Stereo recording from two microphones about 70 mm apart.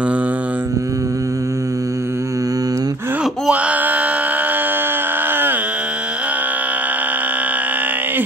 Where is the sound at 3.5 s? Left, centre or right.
Right.